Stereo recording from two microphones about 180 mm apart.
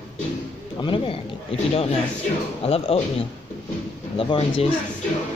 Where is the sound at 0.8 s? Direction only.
30° left (ahead or behind).